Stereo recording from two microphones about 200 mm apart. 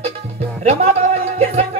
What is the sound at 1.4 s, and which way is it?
Music, 30° right (ahead or behind).